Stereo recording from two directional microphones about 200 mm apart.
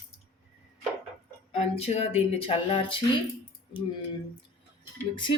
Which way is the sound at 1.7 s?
30° left (ahead or behind).